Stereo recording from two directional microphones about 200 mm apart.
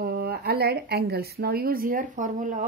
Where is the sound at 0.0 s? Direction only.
50° right (ahead or behind).